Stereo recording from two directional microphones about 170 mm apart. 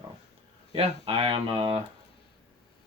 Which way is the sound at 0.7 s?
35° right (ahead or behind).